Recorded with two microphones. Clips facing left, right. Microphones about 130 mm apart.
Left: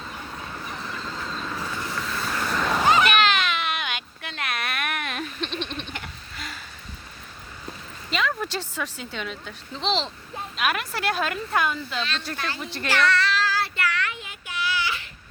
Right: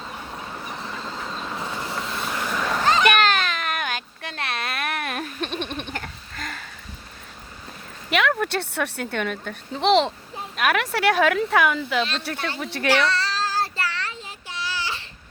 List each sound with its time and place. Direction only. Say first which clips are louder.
0.8 s vehicle: right 1 dB; 20° right (ahead or behind); by 2.7 s 5° right (ahead or behind)
2.7 s a sound: left 1 dB; 5° left (ahead or behind)
3.1 s baby cry: right 2 dB; 45° right (ahead or behind)
8.1 s speech: right 5 dB; 65° right (ahead or behind)
12.5 s speech: right 5 dB; 65° right (ahead or behind)
13.1 s child singing: left 2 dB; 30° right (ahead or behind)